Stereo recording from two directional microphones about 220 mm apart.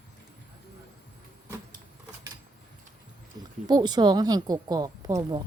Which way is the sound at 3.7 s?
20° right (ahead or behind).